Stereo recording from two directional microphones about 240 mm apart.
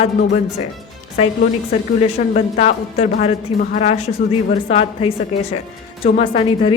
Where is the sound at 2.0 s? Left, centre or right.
Left.